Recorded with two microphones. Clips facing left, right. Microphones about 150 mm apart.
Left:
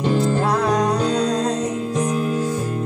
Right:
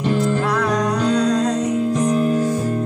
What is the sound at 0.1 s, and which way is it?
Music, 30° left (ahead or behind).